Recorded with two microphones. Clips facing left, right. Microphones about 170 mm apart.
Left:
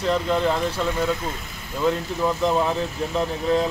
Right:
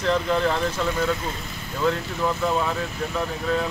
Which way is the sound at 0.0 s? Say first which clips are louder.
Left 1 dB; 5° left (ahead or behind).